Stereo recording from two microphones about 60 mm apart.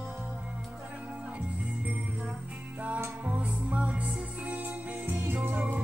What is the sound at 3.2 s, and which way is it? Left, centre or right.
Music, right.